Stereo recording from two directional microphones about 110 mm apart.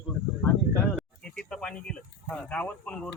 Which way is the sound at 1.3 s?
5° left (ahead or behind).